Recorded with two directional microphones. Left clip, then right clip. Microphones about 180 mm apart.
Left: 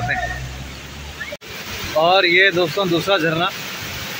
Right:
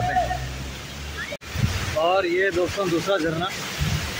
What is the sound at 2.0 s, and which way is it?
Speech, 15° left (ahead or behind).